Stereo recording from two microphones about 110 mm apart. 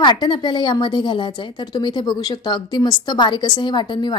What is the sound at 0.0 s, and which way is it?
A woman's voice, 45° left (ahead or behind).